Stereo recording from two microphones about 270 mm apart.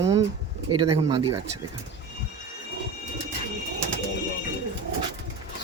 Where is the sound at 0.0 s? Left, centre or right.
Centre.